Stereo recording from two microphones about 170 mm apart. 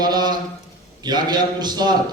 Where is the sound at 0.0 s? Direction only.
25° right (ahead or behind).